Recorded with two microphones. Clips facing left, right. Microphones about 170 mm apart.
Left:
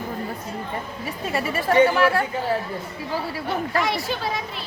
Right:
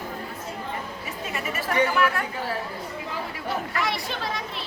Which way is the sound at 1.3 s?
35° left (ahead or behind).